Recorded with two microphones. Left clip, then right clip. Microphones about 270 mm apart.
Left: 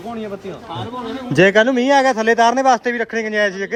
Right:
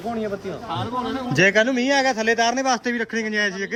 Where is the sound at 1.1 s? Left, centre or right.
Centre.